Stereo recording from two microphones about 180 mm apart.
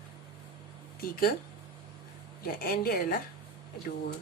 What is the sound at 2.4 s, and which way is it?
Speech, 55° left (ahead or behind).